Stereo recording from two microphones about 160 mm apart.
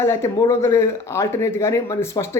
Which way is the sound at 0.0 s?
15° left (ahead or behind).